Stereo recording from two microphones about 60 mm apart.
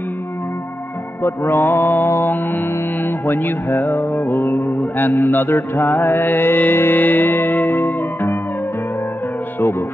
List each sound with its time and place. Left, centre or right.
1.2 s mantra: left
2.0 s music: left
9.6 s speech: left